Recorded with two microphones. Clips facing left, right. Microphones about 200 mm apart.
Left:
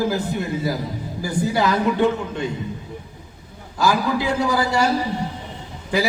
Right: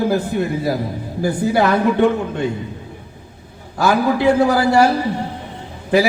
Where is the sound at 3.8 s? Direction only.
60° right (ahead or behind).